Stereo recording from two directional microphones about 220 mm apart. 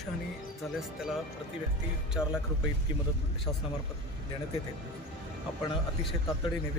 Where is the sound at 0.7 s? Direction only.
Centre (ahead or behind).